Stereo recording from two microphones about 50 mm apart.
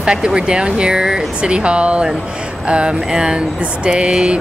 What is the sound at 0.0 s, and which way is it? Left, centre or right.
Speech, centre.